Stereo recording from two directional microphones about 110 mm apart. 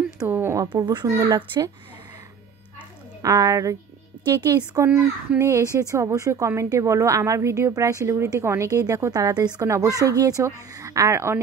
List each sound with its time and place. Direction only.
0.3 s a woman's voice: 20° right (ahead or behind)
0.7 s speech: 35° right (ahead or behind)
3.2 s a woman's voice: 30° right (ahead or behind)
4.8 s a child's voice: 10° right (ahead or behind)
5.4 s a woman's voice: 25° right (ahead or behind)